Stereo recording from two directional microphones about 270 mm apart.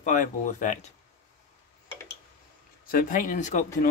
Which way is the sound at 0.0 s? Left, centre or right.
Left.